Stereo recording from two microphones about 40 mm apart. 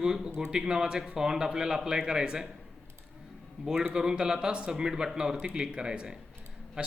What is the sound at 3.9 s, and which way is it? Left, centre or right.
Speech, centre.